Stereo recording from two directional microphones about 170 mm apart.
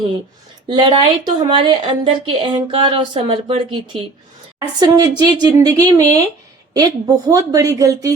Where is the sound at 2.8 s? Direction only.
30° right (ahead or behind).